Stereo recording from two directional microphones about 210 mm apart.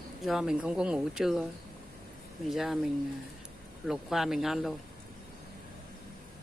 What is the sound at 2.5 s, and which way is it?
Speech, centre (ahead or behind).